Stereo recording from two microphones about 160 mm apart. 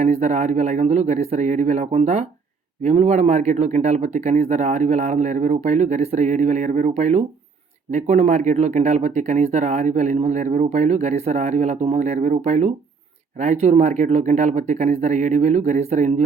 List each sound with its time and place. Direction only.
0.0 s speech: 45° right (ahead or behind)